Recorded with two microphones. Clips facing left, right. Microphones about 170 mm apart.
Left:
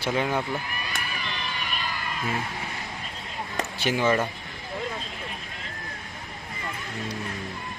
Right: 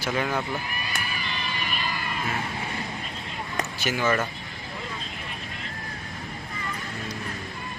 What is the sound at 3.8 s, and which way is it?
Speech, 30° left (ahead or behind).